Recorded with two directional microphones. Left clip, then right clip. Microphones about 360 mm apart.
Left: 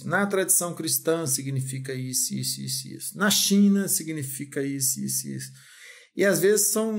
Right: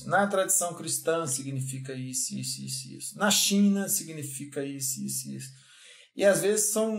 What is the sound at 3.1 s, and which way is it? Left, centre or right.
Speech, left.